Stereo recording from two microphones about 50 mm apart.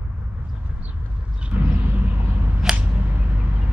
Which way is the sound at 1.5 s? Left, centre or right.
Right.